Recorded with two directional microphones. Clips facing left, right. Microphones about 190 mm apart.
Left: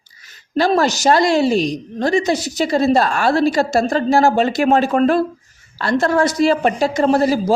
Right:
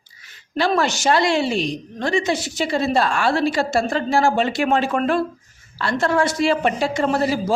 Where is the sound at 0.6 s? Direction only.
40° left (ahead or behind).